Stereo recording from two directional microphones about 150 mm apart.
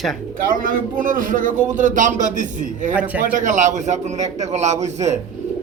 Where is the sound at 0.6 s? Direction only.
65° right (ahead or behind).